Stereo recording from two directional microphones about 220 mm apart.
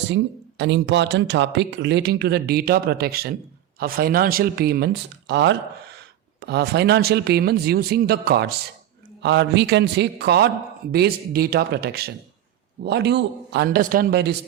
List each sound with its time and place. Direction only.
0.1 s speech: 55° right (ahead or behind)